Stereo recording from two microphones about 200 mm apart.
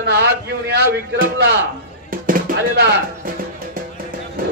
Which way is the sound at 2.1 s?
45° right (ahead or behind).